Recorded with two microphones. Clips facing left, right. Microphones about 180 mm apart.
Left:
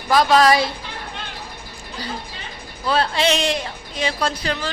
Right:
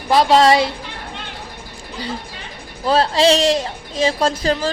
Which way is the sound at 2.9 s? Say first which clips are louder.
Right 5 dB; 35° right (ahead or behind).